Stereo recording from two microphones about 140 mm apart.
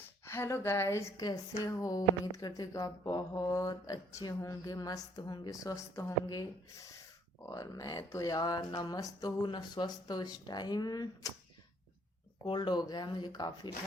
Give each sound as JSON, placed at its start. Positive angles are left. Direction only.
{"t": 0.3, "sound": "a woman's voice", "side_deg": 20}
{"t": 12.5, "sound": "a woman's voice", "side_deg": 30}